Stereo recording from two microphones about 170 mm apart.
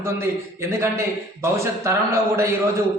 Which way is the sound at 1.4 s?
15° right (ahead or behind).